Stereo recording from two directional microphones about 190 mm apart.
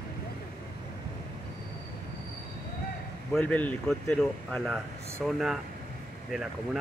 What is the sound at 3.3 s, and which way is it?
Speech, 5° left (ahead or behind).